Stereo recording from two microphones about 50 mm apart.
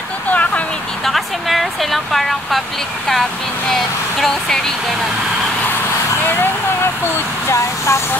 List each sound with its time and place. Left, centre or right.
0.3 s a sound: left
1.0 s speech: centre
3.7 s speech: centre
7.4 s speech: left